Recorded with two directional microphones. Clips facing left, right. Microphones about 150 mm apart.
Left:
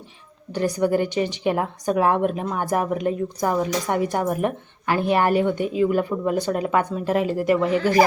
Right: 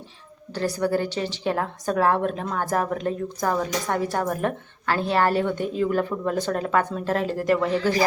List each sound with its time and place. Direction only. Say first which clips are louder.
0.5 s a woman's voice: left 3 dB; 15° left (ahead or behind)
7.8 s a man's voice: left 5 dB; 55° left (ahead or behind)